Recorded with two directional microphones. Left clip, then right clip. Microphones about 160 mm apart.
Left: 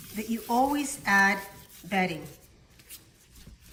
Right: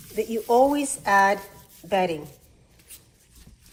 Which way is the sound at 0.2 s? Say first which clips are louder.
Right 7 dB; centre (ahead or behind).